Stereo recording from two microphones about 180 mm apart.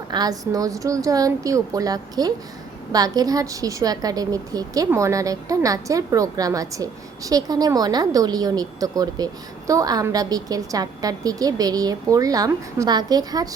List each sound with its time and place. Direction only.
0.1 s a woman's voice: 20° right (ahead or behind)